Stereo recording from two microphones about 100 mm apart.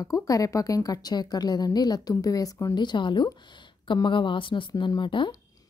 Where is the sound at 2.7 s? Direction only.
50° left (ahead or behind).